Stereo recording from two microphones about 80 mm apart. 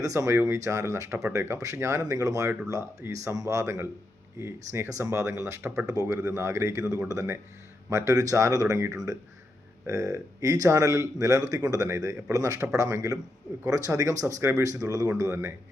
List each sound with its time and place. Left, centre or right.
0.0 s speech: right
5.8 s speech: right